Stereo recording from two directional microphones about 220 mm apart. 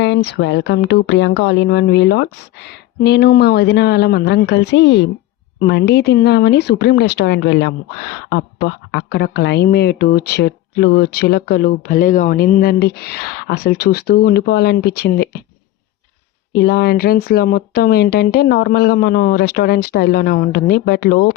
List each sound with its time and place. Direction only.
0.0 s speech: 50° left (ahead or behind)
16.5 s speech: 45° left (ahead or behind)